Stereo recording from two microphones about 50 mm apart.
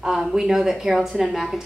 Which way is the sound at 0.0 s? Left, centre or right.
Centre.